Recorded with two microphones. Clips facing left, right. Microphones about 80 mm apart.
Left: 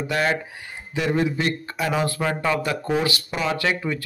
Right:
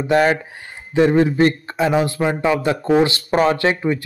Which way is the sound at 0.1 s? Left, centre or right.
Right.